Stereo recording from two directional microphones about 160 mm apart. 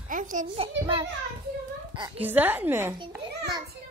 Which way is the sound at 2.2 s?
10° right (ahead or behind).